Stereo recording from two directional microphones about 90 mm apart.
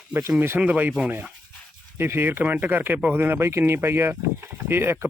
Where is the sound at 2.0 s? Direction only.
25° right (ahead or behind).